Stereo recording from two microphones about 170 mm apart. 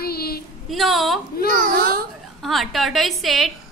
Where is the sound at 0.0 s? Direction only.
65° left (ahead or behind).